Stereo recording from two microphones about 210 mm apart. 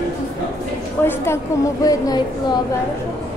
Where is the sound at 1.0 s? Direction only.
10° left (ahead or behind).